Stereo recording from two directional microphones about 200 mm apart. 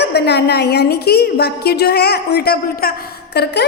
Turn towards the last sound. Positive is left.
turn(degrees=55)  # may be behind; listen again after turning